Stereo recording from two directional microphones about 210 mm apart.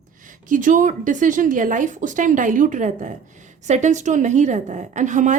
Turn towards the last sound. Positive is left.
turn(degrees=-35)  # may be behind; listen again after turning